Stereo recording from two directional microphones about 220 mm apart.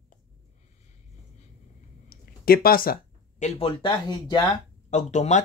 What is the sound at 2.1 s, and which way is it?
Speech, 40° left (ahead or behind).